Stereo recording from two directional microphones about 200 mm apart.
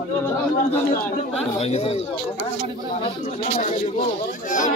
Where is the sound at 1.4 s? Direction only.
30° left (ahead or behind).